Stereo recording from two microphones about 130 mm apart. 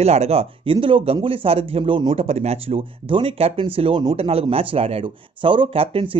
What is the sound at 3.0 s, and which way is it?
Speech, 40° right (ahead or behind).